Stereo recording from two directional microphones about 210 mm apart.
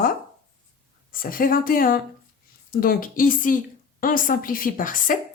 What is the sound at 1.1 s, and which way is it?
A woman's voice, 40° left (ahead or behind).